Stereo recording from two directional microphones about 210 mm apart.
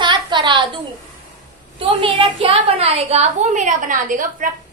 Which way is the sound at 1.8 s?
25° right (ahead or behind).